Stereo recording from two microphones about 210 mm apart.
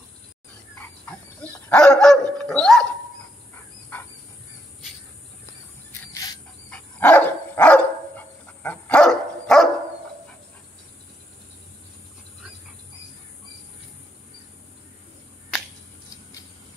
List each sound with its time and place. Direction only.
0.7 s dog: 5° left (ahead or behind)
5.9 s cricket: 15° left (ahead or behind)
6.7 s dog: 5° left (ahead or behind)